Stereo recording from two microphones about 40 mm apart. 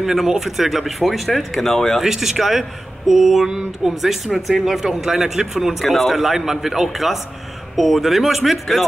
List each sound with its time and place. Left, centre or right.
0.0 s speech: centre
2.0 s speech: centre
3.4 s a sound: centre
4.3 s speech: centre
4.8 s a man's voice: centre